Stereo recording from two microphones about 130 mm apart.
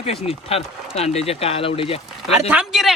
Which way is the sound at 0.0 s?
50° left (ahead or behind).